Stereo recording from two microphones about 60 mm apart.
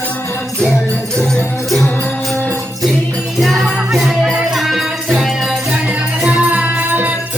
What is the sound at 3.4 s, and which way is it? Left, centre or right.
Music, centre.